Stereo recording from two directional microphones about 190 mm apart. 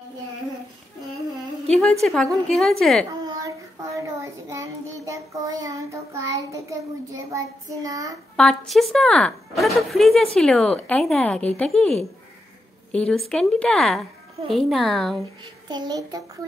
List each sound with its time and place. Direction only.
1.8 s speech: centre (ahead or behind)
3.1 s child singing: 15° right (ahead or behind)
8.4 s speech: centre (ahead or behind)
15.4 s a child's voice: 20° right (ahead or behind)